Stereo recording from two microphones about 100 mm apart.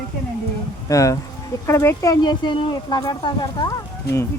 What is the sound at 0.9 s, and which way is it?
Speech, 35° left (ahead or behind).